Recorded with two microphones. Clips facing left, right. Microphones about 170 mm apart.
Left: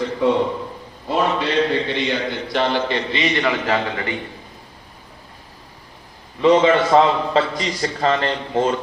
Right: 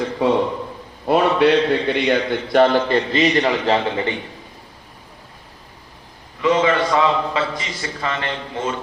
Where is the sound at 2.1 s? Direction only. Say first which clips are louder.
Right 5 dB; 50° right (ahead or behind); by 4.1 s 25° right (ahead or behind).